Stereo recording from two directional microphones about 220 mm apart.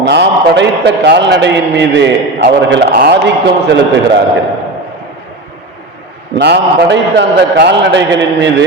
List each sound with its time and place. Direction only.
0.1 s a man's voice: 55° right (ahead or behind)
6.3 s a man's voice: 50° right (ahead or behind)